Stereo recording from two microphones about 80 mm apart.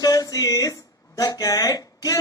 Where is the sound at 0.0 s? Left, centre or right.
Left.